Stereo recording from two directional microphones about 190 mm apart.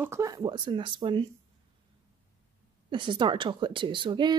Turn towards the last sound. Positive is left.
turn(degrees=-25)  # may be behind; listen again after turning